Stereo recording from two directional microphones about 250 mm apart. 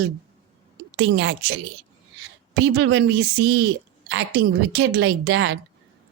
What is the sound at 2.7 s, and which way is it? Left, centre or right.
Speech, right.